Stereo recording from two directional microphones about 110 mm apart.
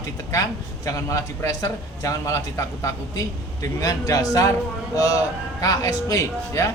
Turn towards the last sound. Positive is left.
turn(degrees=30)  # may be behind; listen again after turning